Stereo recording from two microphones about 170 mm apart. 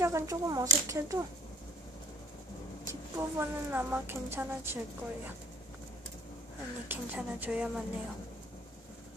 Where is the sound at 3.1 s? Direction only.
10° right (ahead or behind).